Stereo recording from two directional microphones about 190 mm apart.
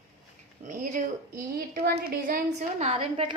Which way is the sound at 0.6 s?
40° right (ahead or behind).